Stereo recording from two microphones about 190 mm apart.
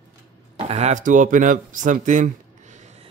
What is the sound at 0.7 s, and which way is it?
Speech, 35° right (ahead or behind).